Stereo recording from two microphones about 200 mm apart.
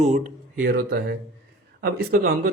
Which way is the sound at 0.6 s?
50° right (ahead or behind).